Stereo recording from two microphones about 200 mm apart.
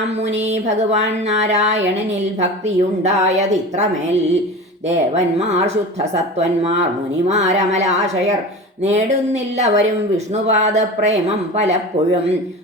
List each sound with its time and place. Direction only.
0.3 s a woman's voice: 35° right (ahead or behind)
7.3 s a woman's voice: 35° right (ahead or behind)